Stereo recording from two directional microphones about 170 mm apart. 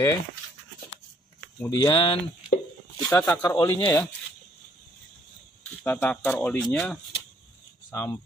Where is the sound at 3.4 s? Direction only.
25° left (ahead or behind).